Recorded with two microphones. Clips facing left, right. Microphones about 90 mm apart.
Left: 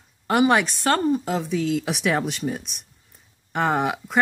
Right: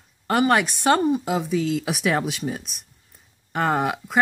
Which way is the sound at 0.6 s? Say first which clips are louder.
Right 2 dB; 15° right (ahead or behind).